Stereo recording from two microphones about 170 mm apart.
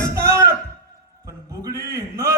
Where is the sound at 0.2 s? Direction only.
15° right (ahead or behind).